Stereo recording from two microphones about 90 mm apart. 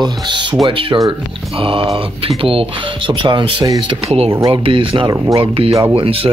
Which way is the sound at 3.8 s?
90° right.